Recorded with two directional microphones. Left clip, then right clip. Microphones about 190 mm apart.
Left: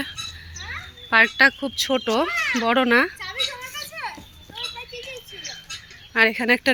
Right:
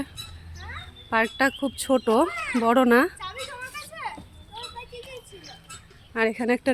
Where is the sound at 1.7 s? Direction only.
25° right (ahead or behind).